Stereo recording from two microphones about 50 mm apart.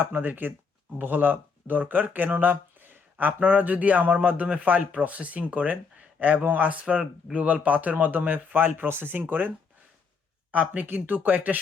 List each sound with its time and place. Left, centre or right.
0.0 s speech: right
10.5 s speech: right